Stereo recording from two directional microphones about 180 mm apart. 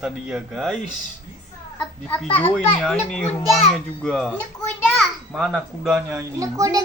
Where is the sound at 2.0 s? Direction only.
10° left (ahead or behind).